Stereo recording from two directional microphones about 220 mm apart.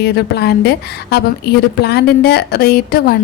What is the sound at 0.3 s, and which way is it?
A woman's voice, 50° left (ahead or behind).